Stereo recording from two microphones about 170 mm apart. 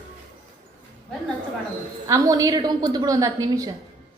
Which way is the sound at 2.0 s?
20° right (ahead or behind).